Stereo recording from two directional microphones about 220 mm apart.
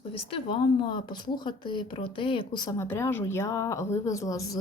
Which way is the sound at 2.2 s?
25° left (ahead or behind).